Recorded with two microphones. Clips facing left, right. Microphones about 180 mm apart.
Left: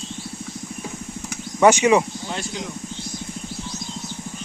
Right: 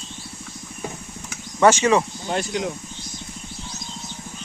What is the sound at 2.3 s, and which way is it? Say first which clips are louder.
Speech: right 5 dB; 55° right (ahead or behind).